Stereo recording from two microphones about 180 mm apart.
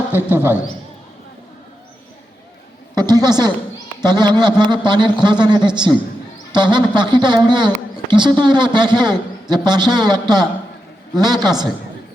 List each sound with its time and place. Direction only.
0.1 s a man's voice: 10° right (ahead or behind)
2.9 s speech: 20° right (ahead or behind)